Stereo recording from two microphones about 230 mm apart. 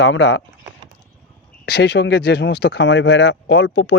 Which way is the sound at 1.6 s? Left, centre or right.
Left.